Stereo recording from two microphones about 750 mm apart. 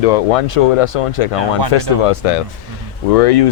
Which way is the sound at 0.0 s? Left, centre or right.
Left.